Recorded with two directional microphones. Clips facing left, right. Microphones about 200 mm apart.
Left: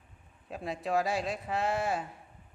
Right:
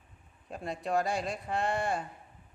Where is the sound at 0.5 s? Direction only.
Centre (ahead or behind).